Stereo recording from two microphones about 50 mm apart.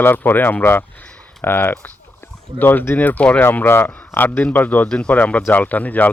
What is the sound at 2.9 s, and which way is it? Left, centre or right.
Speech, left.